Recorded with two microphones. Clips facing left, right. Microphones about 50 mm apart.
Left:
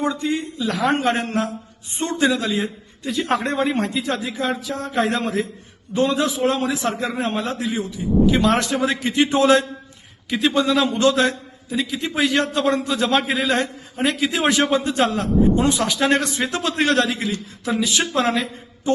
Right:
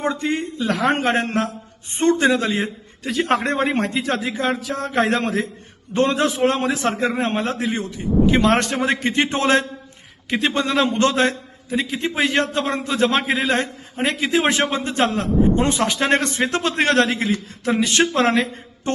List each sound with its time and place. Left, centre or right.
0.0 s a man's voice: right
3.0 s a man's voice: right
5.9 s a man's voice: right